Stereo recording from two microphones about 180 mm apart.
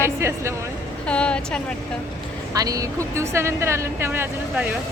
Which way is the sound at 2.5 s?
20° right (ahead or behind).